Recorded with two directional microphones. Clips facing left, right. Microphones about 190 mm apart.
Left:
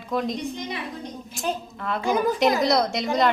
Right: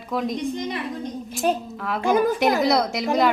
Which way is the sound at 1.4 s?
55° right (ahead or behind).